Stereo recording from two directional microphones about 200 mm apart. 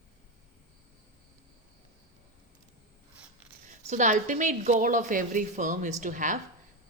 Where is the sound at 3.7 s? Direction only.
35° right (ahead or behind).